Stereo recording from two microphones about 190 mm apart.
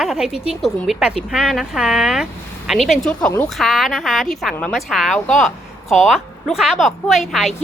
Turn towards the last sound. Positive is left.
turn(degrees=0)  # may be behind; listen again after turning